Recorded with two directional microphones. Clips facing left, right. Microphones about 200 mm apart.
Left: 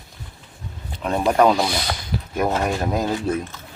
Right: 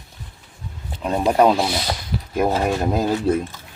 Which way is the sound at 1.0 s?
10° right (ahead or behind).